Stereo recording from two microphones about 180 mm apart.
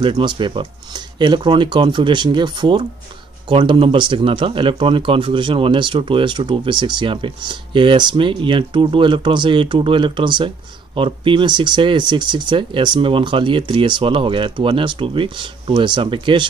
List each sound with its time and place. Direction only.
0.0 s speech: 25° right (ahead or behind)